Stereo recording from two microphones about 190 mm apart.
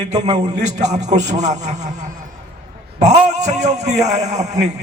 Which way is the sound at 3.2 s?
40° right (ahead or behind).